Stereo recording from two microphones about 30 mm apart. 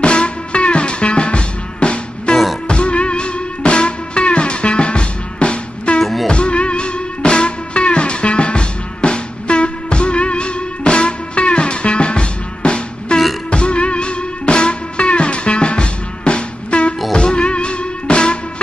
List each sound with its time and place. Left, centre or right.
0.0 s music: left